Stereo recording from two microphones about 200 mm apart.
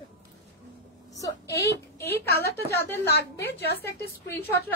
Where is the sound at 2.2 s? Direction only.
50° left (ahead or behind).